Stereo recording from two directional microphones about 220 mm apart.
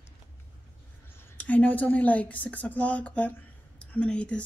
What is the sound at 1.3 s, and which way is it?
Speech, 5° left (ahead or behind).